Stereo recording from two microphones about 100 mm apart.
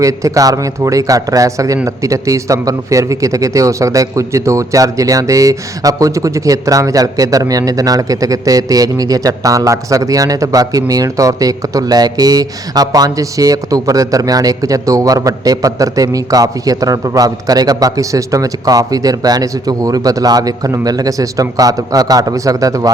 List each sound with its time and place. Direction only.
0.0 s speech: 35° right (ahead or behind)